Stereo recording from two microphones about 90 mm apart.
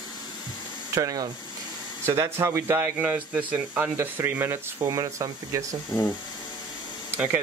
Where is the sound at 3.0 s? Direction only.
20° right (ahead or behind).